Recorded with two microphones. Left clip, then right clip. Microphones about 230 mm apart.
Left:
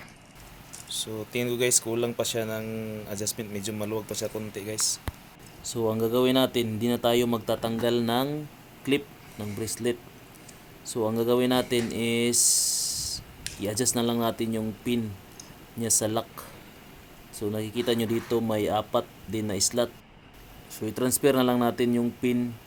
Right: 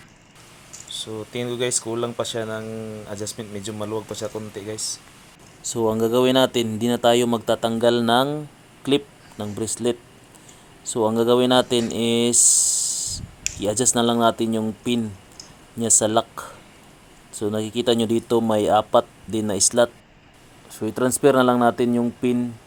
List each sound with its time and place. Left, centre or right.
1.0 s speech: centre
5.6 s speech: right
10.9 s speech: centre
13.4 s speech: centre